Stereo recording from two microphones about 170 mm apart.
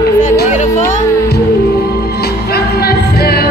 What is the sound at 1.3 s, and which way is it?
Music, 65° left (ahead or behind).